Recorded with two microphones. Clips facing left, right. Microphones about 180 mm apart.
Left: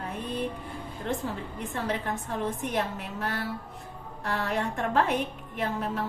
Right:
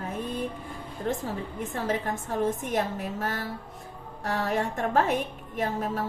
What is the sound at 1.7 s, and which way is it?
A woman's voice, 45° right (ahead or behind).